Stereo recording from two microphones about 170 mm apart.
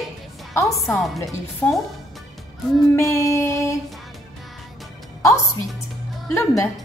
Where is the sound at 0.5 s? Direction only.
20° left (ahead or behind).